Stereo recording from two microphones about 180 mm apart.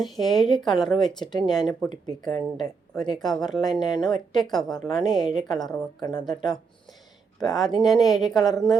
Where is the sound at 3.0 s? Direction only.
Centre (ahead or behind).